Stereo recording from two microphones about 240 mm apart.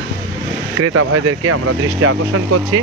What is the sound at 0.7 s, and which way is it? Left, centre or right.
Speech, right.